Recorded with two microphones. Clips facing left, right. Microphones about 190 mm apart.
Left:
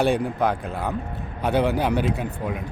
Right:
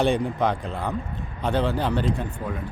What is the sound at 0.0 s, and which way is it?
Speech, centre (ahead or behind).